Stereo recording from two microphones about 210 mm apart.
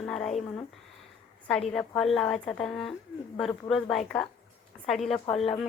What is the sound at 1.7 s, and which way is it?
A woman's voice, 5° left (ahead or behind).